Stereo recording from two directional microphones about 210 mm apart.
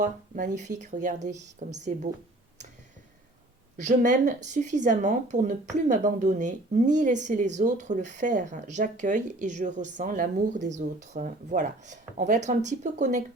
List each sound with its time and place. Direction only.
0.0 s speech: 35° right (ahead or behind)
3.8 s speech: 35° right (ahead or behind)